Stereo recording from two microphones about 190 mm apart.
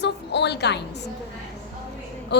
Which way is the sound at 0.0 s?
60° left (ahead or behind).